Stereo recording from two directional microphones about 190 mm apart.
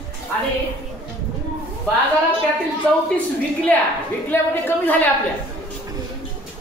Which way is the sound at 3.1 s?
5° left (ahead or behind).